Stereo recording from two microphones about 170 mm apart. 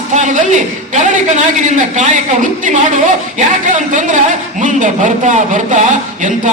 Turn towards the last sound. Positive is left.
turn(degrees=-50)  # may be behind; listen again after turning